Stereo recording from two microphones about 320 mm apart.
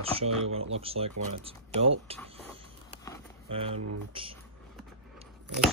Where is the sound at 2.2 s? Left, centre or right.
Centre.